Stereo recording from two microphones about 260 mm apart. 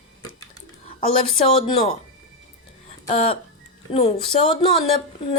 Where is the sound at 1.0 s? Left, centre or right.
Left.